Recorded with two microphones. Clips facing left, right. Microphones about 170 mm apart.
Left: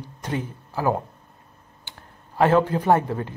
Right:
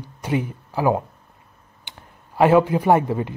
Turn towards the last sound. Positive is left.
turn(degrees=-10)  # may be behind; listen again after turning